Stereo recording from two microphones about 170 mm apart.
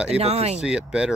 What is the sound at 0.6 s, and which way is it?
Speech, 5° right (ahead or behind).